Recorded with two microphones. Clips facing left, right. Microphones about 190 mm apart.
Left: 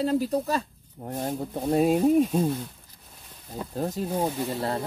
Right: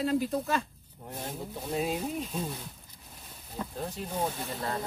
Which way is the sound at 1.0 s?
45° left (ahead or behind).